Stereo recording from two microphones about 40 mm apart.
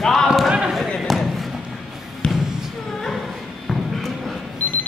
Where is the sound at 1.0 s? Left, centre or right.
Centre.